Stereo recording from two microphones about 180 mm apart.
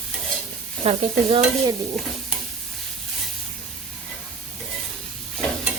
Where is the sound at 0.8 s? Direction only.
35° right (ahead or behind).